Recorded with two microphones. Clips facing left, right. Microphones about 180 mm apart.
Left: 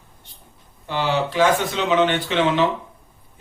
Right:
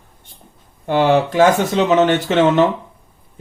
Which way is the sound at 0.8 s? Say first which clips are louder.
Right 8 dB; 50° right (ahead or behind).